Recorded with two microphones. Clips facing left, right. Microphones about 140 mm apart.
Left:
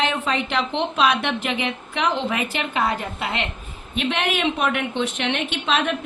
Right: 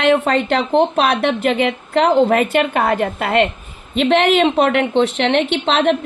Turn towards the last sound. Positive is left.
turn(degrees=-65)  # may be behind; listen again after turning